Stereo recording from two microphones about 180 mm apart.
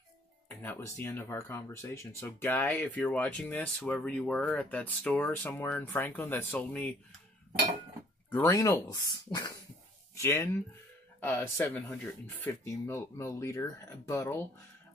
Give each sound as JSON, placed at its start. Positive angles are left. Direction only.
{"t": 0.5, "sound": "speech", "side_deg": 10}
{"t": 8.3, "sound": "speech", "side_deg": 15}